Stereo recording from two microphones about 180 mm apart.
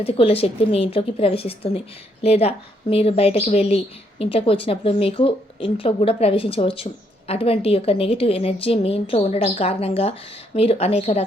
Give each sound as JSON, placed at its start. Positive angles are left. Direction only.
{"t": 0.0, "sound": "a woman's voice", "side_deg": 35}